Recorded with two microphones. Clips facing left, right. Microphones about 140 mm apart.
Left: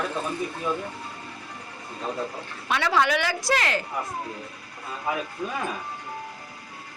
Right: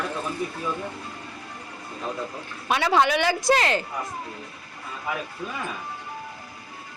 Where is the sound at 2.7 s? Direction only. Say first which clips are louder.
Right 2 dB; 20° right (ahead or behind).